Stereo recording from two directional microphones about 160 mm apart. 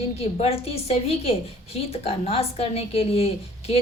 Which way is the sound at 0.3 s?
40° left (ahead or behind).